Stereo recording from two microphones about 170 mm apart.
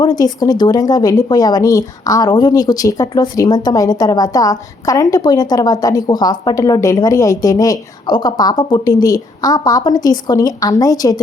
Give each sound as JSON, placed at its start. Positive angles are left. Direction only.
{"t": 0.0, "sound": "a woman's voice", "side_deg": 25}